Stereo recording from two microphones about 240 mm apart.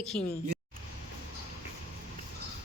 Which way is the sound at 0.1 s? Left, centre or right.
Centre.